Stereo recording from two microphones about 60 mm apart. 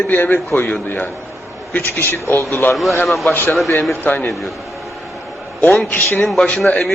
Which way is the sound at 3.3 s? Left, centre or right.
Left.